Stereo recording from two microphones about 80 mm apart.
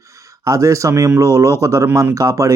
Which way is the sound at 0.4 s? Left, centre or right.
Right.